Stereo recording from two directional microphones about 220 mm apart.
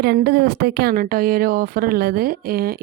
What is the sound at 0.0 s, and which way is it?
Speech, 50° right (ahead or behind).